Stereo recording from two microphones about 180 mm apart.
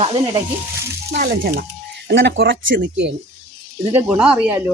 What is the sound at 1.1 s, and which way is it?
Speech, 65° right (ahead or behind).